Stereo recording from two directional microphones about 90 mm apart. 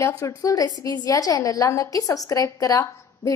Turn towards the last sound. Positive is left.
turn(degrees=35)  # may be behind; listen again after turning